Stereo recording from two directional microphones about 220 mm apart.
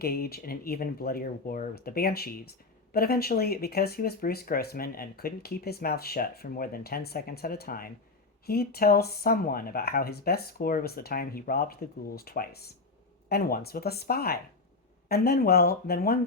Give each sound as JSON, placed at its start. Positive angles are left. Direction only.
{"t": 0.0, "sound": "speech", "side_deg": 45}